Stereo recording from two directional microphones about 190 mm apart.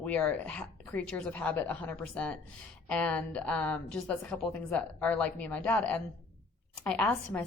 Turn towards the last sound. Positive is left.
turn(degrees=5)  # may be behind; listen again after turning